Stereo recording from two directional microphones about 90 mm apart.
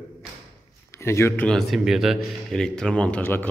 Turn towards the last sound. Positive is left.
turn(degrees=20)  # may be behind; listen again after turning